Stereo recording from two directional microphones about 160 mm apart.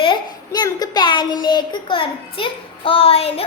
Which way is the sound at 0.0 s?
30° left (ahead or behind).